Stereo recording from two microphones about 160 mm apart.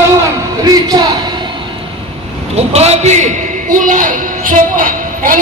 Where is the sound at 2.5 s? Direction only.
40° right (ahead or behind).